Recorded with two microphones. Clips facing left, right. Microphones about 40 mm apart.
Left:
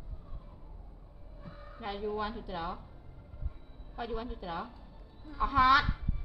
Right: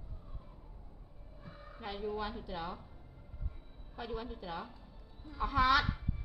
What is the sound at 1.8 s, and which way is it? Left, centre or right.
A woman's voice, centre.